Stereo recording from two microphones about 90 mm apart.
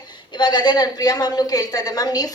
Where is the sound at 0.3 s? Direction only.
55° left (ahead or behind).